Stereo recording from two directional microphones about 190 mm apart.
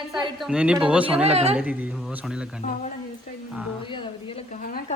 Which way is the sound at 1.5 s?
5° right (ahead or behind).